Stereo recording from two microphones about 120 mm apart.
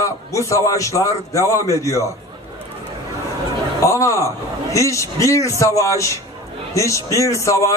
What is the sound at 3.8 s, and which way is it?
A man's voice, 25° left (ahead or behind).